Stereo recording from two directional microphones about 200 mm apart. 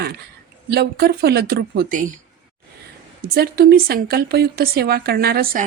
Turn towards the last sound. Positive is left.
turn(degrees=-50)  # may be behind; listen again after turning